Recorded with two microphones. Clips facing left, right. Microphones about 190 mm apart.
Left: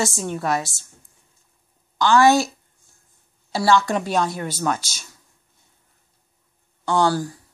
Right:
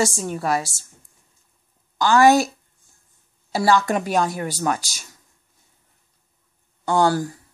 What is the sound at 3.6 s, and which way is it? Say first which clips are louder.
Speech: even; 15° right (ahead or behind).